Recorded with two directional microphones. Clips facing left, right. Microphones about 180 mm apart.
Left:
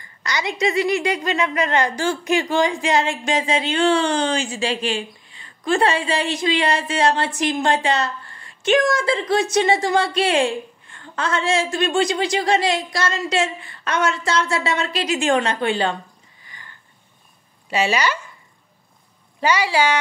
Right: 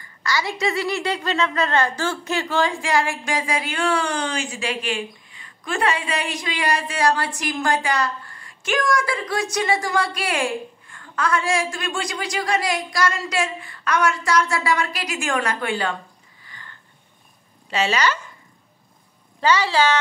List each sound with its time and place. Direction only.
0.2 s a woman's voice: 20° left (ahead or behind)
16.4 s a sound: 15° left (ahead or behind)
17.6 s speech: 10° left (ahead or behind)
19.4 s speech: 10° left (ahead or behind)